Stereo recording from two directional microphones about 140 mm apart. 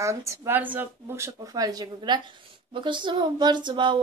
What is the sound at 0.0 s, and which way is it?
Speech, 20° right (ahead or behind).